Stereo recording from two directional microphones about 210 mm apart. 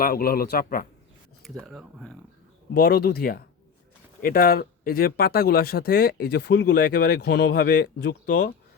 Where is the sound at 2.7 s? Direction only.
45° left (ahead or behind).